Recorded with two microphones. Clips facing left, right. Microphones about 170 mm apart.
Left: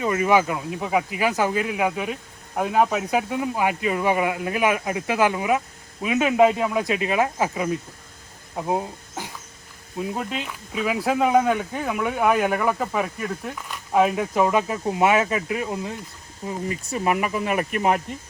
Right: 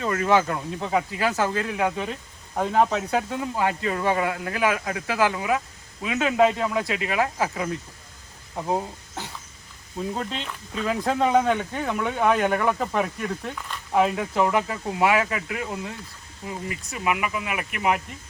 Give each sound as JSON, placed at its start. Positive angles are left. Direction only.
{"t": 0.0, "sound": "speech", "side_deg": 15}